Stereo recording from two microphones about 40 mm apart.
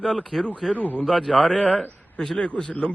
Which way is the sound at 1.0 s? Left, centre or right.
Centre.